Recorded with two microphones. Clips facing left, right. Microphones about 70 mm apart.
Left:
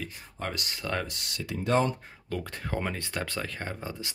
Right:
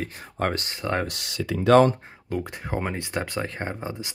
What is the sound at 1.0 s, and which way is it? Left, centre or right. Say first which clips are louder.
Speech: right 7 dB; right.